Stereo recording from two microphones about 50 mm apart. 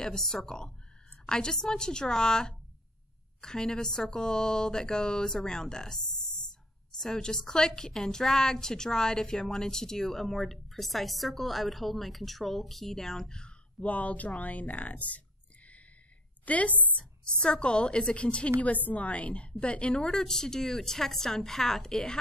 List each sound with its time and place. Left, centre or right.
0.0 s a woman's voice: centre
13.7 s speech: left
16.4 s a woman's voice: left; by 22.2 s centre